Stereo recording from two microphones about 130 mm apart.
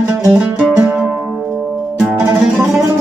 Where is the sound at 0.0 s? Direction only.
10° right (ahead or behind).